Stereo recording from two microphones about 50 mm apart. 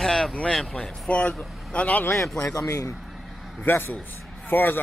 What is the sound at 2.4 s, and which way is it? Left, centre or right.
Speech, left.